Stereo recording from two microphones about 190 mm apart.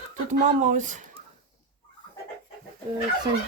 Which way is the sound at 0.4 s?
40° right (ahead or behind).